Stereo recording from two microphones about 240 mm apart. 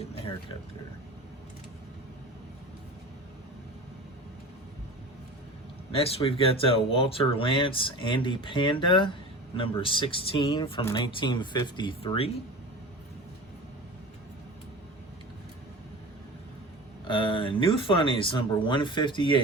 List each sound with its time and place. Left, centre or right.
0.0 s speech: left
5.9 s speech: left
17.1 s speech: left